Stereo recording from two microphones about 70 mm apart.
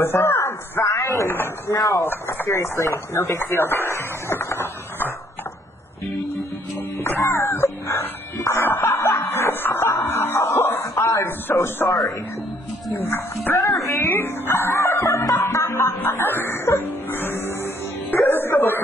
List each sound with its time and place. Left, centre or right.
0.0 s speech: left
2.0 s speech: left
7.0 s speech: left
8.6 s music: left
12.9 s speech: left
14.5 s music: left